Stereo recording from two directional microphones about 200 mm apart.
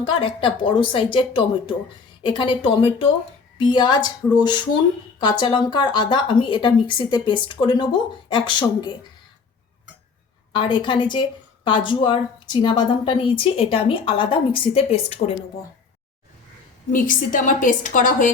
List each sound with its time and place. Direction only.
0.3 s a woman's voice: 25° left (ahead or behind)
10.5 s a woman's voice: 25° left (ahead or behind)
16.9 s a woman's voice: 40° left (ahead or behind)